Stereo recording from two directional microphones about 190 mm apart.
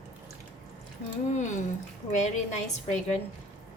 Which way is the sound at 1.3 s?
40° left (ahead or behind).